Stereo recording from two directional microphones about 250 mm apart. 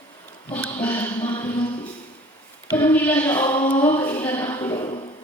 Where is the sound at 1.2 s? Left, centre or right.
Centre.